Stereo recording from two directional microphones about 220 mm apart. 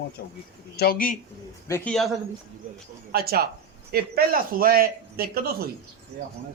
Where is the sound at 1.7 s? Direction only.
5° left (ahead or behind).